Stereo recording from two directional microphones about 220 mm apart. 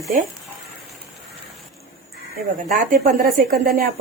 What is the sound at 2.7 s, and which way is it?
Speech, 45° right (ahead or behind).